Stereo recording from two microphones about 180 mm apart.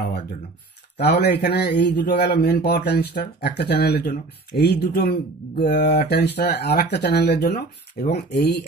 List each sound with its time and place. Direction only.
0.9 s speech: 65° left (ahead or behind)